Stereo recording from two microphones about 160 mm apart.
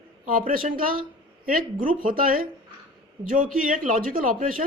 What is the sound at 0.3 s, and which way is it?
A man's voice, 60° right (ahead or behind).